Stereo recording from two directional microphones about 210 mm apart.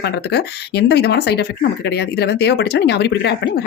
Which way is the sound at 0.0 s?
50° left (ahead or behind).